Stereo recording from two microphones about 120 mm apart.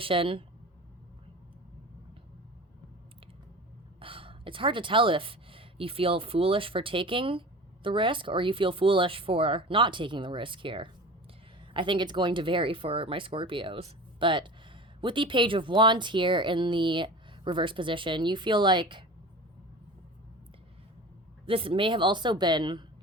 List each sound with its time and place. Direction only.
0.0 s speech: 45° right (ahead or behind)
4.0 s speech: 45° right (ahead or behind)
21.4 s a woman's voice: 50° right (ahead or behind)